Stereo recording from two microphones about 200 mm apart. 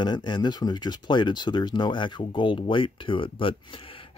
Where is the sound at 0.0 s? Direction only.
20° left (ahead or behind).